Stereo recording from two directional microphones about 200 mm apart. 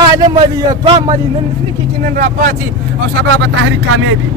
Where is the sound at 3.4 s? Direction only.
75° right (ahead or behind).